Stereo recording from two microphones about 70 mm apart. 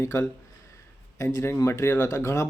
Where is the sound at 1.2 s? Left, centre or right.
Left.